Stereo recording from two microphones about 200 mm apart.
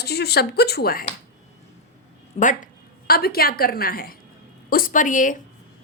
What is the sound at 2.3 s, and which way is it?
A woman's voice, 40° left (ahead or behind).